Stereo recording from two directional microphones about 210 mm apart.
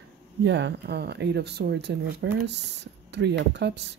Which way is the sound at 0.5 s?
55° right (ahead or behind).